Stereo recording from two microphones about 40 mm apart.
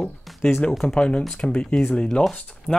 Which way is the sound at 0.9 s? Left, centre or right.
Left.